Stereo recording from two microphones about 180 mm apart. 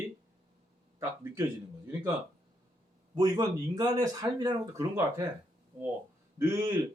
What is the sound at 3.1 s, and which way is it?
Speech, 20° right (ahead or behind).